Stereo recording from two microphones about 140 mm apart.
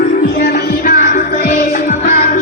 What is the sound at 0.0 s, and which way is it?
Music, 85° left.